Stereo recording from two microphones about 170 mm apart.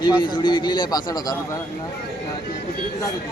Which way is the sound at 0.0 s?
25° left (ahead or behind).